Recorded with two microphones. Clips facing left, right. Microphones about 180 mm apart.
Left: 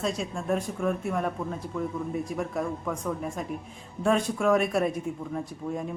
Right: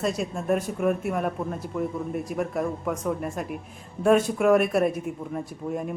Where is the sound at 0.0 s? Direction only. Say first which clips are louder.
Right 3 dB; 5° right (ahead or behind).